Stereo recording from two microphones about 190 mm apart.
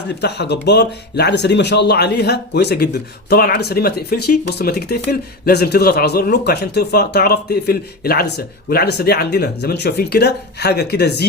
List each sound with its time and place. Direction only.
0.2 s speech: 60° left (ahead or behind)